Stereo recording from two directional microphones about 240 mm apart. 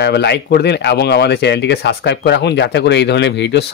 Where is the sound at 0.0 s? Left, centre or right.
Left.